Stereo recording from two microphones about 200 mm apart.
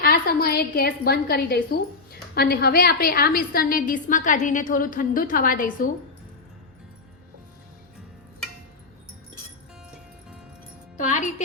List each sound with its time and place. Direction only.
0.0 s a woman's voice: 50° left (ahead or behind)
10.9 s speech: 40° left (ahead or behind)